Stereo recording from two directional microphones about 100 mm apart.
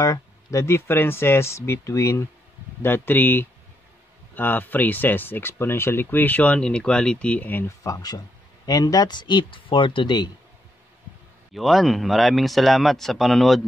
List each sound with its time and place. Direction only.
0.0 s speech: 35° left (ahead or behind); by 7.7 s 20° left (ahead or behind)
7.8 s speech: 35° left (ahead or behind)
11.5 s speech: centre (ahead or behind)